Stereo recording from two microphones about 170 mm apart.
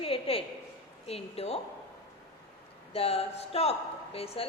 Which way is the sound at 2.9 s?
35° left (ahead or behind).